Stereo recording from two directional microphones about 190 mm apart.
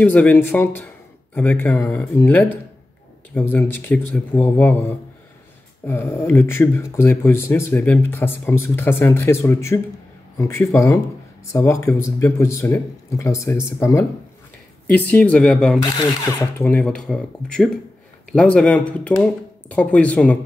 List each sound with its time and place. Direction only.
0.0 s speech: 10° left (ahead or behind)
15.8 s speech: 20° left (ahead or behind)